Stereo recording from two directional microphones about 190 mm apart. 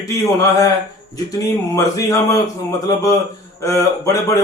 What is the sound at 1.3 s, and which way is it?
A man's voice, 15° left (ahead or behind).